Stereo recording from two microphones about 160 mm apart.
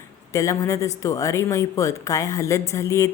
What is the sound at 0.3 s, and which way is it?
A woman's voice, 20° left (ahead or behind).